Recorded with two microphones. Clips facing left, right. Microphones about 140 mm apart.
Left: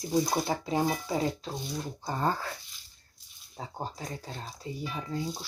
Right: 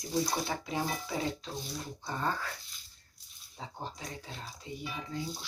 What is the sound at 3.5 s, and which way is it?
Speech, 40° left (ahead or behind).